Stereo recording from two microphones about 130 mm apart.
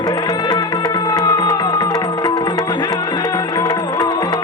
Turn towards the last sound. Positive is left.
turn(degrees=30)  # may be behind; listen again after turning